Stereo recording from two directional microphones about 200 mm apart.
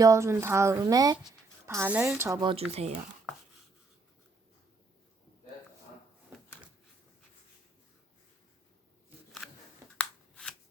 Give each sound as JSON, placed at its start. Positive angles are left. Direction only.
{"t": 0.0, "sound": "speech", "side_deg": -15}
{"t": 10.0, "sound": "scissors", "side_deg": 5}